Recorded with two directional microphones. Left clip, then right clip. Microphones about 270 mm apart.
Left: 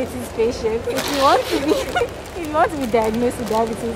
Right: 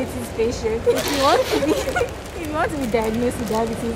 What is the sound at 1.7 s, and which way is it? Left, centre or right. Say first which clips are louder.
Speech: left 2 dB; centre.